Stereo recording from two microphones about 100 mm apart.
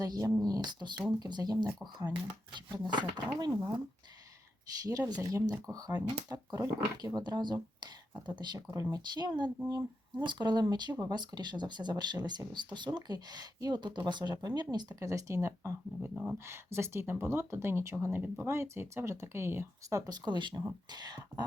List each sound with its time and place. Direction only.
0.0 s speech: 40° right (ahead or behind)
4.8 s speech: 40° right (ahead or behind)
8.6 s speech: 35° right (ahead or behind)
16.0 s speech: 10° right (ahead or behind)
16.5 s speech: 25° right (ahead or behind); by 21.4 s 45° right (ahead or behind)